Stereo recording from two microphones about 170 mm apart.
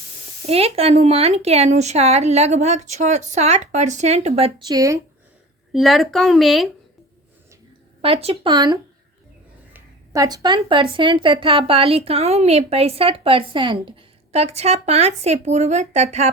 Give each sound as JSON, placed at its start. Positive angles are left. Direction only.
{"t": 0.4, "sound": "a woman's voice", "side_deg": -35}
{"t": 4.7, "sound": "speech", "side_deg": -20}
{"t": 5.7, "sound": "a woman's voice", "side_deg": 0}
{"t": 8.0, "sound": "a woman's voice", "side_deg": -35}
{"t": 9.7, "sound": "a sound", "side_deg": -20}
{"t": 10.6, "sound": "a woman's voice", "side_deg": -30}